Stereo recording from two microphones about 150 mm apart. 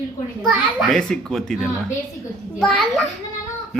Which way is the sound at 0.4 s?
Centre (ahead or behind).